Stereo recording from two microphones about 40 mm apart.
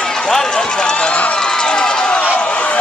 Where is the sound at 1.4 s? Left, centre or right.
Centre.